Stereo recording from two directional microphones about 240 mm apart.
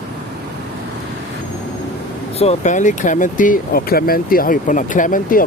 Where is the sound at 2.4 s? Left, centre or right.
Left.